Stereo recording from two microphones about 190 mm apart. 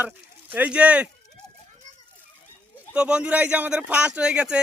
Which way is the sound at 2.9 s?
5° right (ahead or behind).